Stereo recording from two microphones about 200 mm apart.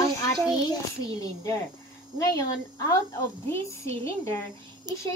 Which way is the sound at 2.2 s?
15° left (ahead or behind).